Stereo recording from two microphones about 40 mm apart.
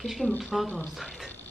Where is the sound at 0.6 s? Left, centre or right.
Left.